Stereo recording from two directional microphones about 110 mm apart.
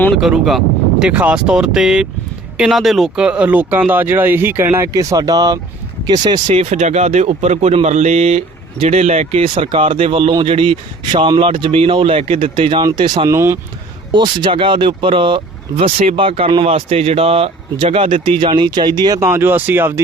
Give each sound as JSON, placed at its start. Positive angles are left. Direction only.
{"t": 0.2, "sound": "speech", "side_deg": 0}
{"t": 6.5, "sound": "a man's voice", "side_deg": -75}
{"t": 13.2, "sound": "speech", "side_deg": -25}
{"t": 14.1, "sound": "a man's voice", "side_deg": -45}
{"t": 15.8, "sound": "speech", "side_deg": -60}
{"t": 16.6, "sound": "speech", "side_deg": -65}
{"t": 19.2, "sound": "speech", "side_deg": -20}